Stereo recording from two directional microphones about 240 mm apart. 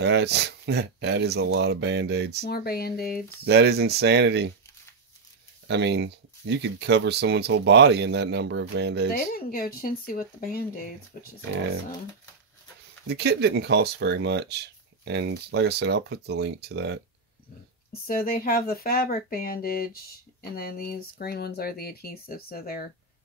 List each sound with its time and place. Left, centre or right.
0.0 s speech: right
2.4 s speech: left
3.4 s speech: right
5.7 s speech: right
9.3 s speech: left
13.1 s speech: right
18.0 s speech: left